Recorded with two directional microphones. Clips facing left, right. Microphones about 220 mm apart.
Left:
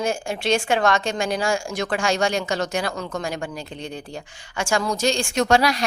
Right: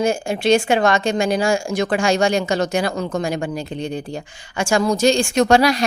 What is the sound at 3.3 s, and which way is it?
Speech, 10° right (ahead or behind).